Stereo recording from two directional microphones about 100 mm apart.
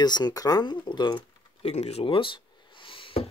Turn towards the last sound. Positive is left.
turn(degrees=60)  # may be behind; listen again after turning